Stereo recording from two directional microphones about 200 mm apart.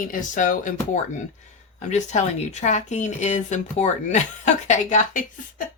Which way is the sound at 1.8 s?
35° left (ahead or behind).